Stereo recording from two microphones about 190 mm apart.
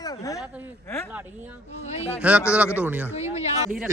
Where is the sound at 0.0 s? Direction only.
20° left (ahead or behind).